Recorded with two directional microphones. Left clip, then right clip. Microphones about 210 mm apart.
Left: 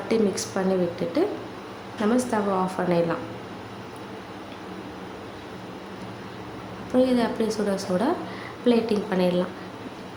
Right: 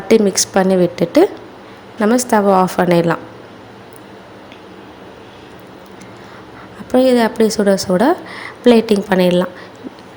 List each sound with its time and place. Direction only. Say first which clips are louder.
0.1 s a woman's voice: right 12 dB; 40° right (ahead or behind)
6.9 s a woman's voice: right 10 dB; 35° right (ahead or behind)